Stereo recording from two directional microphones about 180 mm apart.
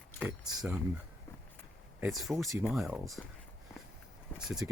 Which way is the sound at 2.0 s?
Centre (ahead or behind).